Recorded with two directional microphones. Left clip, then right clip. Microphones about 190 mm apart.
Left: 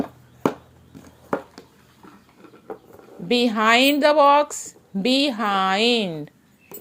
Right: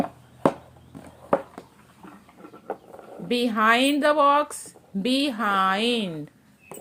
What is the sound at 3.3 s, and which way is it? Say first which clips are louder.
A woman's voice: left 3 dB; 25° left (ahead or behind).